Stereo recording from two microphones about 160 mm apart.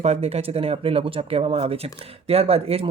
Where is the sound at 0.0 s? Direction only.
40° right (ahead or behind).